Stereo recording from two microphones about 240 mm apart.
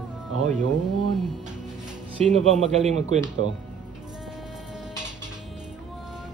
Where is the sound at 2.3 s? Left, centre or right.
Right.